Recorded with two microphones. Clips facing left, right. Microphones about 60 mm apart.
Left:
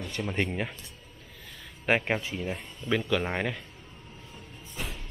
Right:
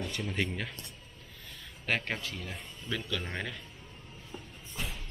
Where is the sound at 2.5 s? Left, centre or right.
Centre.